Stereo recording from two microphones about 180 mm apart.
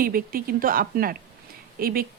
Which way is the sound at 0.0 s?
55° right (ahead or behind).